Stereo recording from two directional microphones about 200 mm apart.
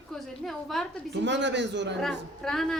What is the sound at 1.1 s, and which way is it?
Speech, 60° right (ahead or behind).